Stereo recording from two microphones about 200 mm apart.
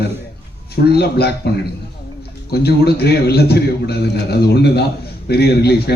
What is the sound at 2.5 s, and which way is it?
A man's voice, 55° left (ahead or behind).